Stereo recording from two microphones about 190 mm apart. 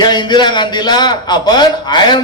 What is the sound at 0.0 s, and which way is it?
A man's voice, 25° left (ahead or behind).